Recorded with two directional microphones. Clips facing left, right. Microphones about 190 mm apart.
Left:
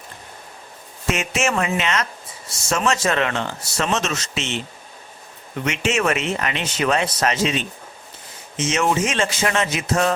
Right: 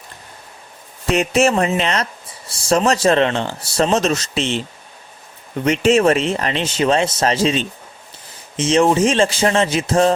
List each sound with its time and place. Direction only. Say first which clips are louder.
1.1 s speech: right 7 dB; 35° right (ahead or behind)